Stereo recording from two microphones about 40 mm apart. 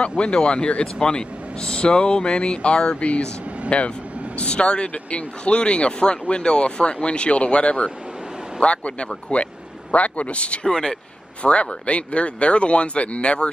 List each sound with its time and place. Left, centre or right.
0.2 s speech: left
1.0 s speech: centre
3.0 s speech: left
10.7 s speech: centre
11.4 s speech: left